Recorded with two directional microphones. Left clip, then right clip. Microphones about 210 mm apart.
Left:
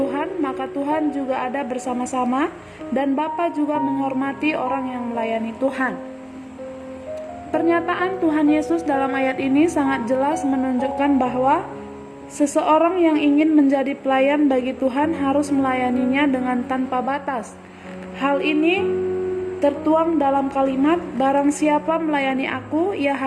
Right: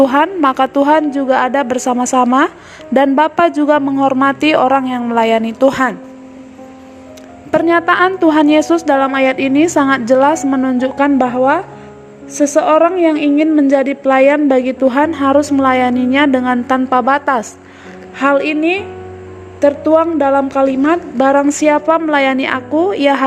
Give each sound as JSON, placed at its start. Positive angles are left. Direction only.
{"t": 0.0, "sound": "speech", "side_deg": -45}
{"t": 7.5, "sound": "a woman's voice", "side_deg": -40}